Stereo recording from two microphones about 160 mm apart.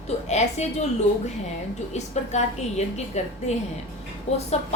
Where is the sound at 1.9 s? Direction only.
45° left (ahead or behind).